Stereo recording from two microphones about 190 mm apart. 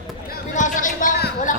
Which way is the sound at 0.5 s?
40° left (ahead or behind).